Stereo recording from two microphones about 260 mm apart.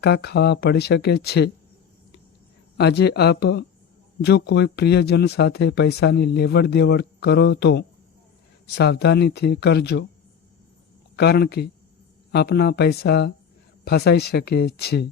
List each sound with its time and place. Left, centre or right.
0.0 s speech: left
2.7 s speech: left
11.2 s speech: left